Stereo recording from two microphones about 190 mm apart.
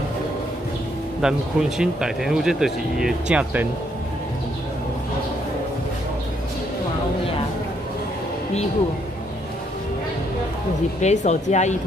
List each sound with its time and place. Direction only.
1.2 s speech: 5° right (ahead or behind)
11.0 s speech: 35° left (ahead or behind)